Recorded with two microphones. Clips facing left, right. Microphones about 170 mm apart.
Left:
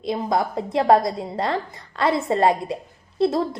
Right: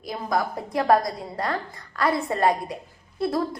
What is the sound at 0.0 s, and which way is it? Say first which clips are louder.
A woman's voice: left 4 dB; 25° left (ahead or behind).